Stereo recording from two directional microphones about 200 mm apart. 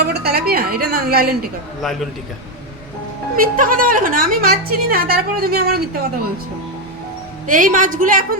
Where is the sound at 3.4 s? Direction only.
40° right (ahead or behind).